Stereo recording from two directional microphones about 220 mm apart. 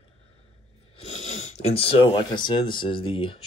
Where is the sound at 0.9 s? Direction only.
30° left (ahead or behind).